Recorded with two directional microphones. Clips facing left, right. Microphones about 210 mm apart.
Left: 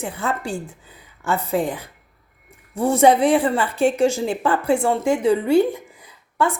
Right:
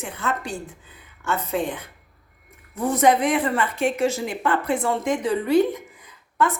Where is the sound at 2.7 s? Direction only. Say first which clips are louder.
Left 4 dB; 30° left (ahead or behind).